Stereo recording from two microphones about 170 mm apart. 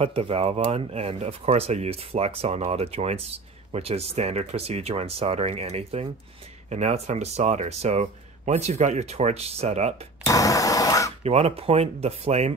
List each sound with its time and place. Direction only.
0.0 s speech: 35° right (ahead or behind)
10.2 s a sound: 20° left (ahead or behind)
11.2 s speech: 35° right (ahead or behind)